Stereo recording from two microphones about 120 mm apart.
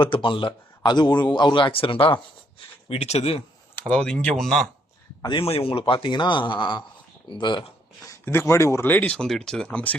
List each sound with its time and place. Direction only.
0.0 s speech: 45° left (ahead or behind)
2.9 s speech: 60° left (ahead or behind)
3.8 s speech: 10° left (ahead or behind)
5.4 s speech: 50° left (ahead or behind)
8.2 s speech: 20° left (ahead or behind)
9.1 s speech: 5° left (ahead or behind)